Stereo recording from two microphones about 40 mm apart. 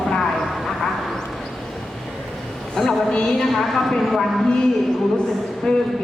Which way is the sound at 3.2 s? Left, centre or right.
Centre.